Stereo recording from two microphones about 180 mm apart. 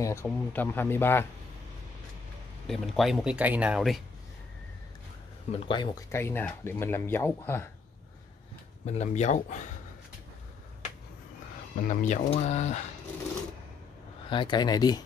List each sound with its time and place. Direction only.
0.0 s speech: 15° left (ahead or behind)
2.6 s speech: centre (ahead or behind)
5.5 s speech: 25° left (ahead or behind)
6.1 s speech: 15° left (ahead or behind)
8.8 s speech: 40° left (ahead or behind)
11.7 s speech: 45° left (ahead or behind)
14.3 s speech: 25° left (ahead or behind)